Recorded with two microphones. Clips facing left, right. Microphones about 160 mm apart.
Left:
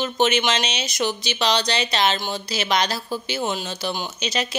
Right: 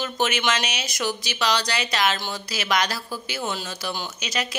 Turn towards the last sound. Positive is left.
turn(degrees=25)  # may be behind; listen again after turning